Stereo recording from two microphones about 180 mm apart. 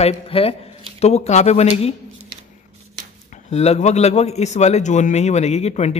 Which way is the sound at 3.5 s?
35° left (ahead or behind).